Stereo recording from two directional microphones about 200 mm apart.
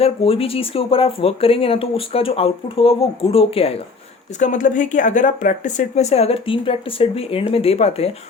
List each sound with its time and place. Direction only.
0.0 s speech: 30° left (ahead or behind)